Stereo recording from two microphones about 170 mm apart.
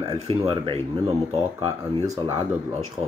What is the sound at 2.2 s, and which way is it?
Speech, 30° right (ahead or behind).